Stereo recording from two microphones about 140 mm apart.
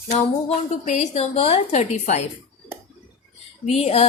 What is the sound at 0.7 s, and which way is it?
A woman's voice, 60° left (ahead or behind).